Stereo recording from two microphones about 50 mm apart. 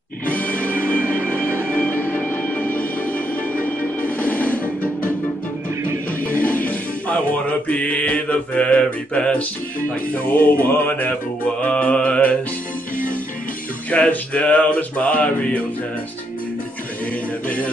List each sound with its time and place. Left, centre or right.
0.3 s music: left
0.7 s music: right
1.7 s music: left
6.2 s music: left
7.6 s mantra: left
10.2 s music: left
11.6 s mantra: left
13.8 s mantra: left